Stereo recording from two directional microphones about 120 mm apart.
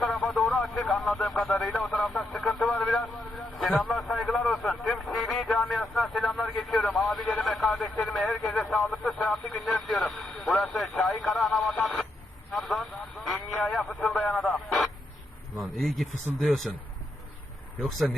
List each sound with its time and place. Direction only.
0.1 s radio: centre (ahead or behind)
0.5 s speech: centre (ahead or behind)
1.9 s radio: 5° left (ahead or behind)
3.7 s a sound: 5° left (ahead or behind)
6.0 s vehicle: centre (ahead or behind)
7.4 s radio: centre (ahead or behind)
10.3 s radio: 10° left (ahead or behind)
11.2 s radio: centre (ahead or behind)
12.5 s vehicle: centre (ahead or behind)
13.7 s radio: 10° left (ahead or behind)
15.5 s speech: centre (ahead or behind)